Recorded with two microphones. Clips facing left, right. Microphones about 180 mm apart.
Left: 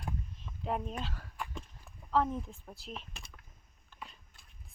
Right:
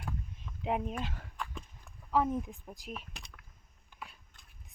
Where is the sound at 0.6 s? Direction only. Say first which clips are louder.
Right 2 dB; 15° right (ahead or behind).